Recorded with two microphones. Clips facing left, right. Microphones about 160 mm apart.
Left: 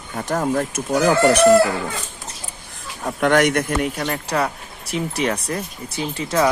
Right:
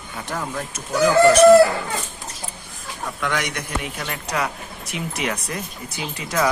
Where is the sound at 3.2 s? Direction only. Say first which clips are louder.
Left 10 dB; 55° left (ahead or behind).